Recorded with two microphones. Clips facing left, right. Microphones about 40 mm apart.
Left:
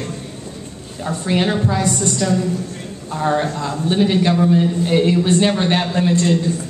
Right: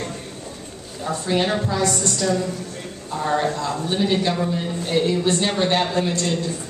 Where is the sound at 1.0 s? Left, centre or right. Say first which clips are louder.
Left 3 dB; centre.